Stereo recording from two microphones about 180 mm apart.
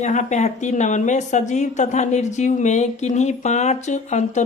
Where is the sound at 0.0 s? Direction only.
40° left (ahead or behind).